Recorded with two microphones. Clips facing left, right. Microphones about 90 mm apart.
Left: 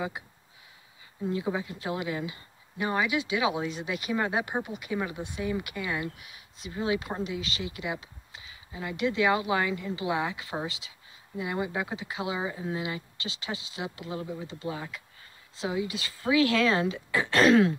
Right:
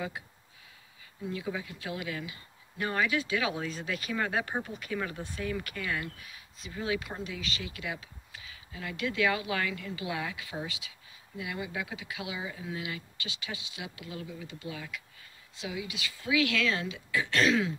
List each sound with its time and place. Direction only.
1.3 s speech: 25° left (ahead or behind)
2.8 s speech: 15° left (ahead or behind); by 17.7 s 50° left (ahead or behind)